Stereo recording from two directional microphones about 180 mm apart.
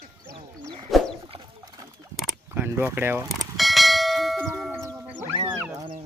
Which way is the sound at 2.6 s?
10° right (ahead or behind).